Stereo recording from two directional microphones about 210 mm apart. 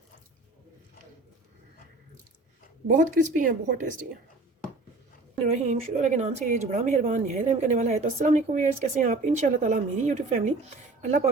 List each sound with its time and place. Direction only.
2.8 s speech: 40° right (ahead or behind)
5.6 s speech: 35° right (ahead or behind)